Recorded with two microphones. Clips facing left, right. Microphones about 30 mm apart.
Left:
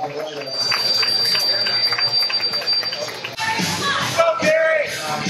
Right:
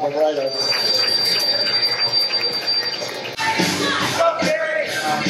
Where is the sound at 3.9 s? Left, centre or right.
Centre.